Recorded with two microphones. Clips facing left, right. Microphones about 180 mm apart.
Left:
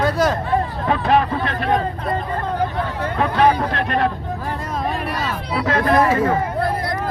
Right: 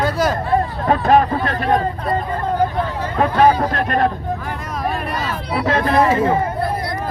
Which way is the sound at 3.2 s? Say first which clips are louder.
Right 3 dB; 40° right (ahead or behind).